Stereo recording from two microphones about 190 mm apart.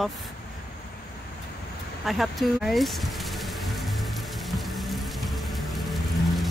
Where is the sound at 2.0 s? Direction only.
Centre (ahead or behind).